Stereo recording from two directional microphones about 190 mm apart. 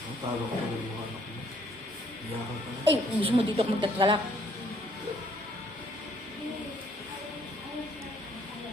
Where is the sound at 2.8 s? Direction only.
30° right (ahead or behind).